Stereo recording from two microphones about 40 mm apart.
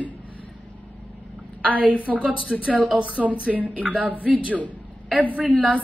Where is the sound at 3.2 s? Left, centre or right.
Right.